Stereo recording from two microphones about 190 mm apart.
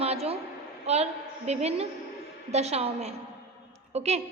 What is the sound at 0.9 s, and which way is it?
A woman's voice, 35° right (ahead or behind).